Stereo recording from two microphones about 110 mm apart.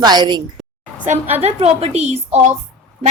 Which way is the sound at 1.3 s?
75° right (ahead or behind).